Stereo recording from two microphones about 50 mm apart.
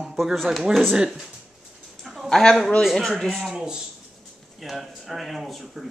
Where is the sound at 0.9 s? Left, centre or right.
Centre.